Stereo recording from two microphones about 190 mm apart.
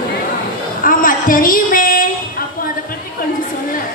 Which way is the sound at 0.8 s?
45° left (ahead or behind).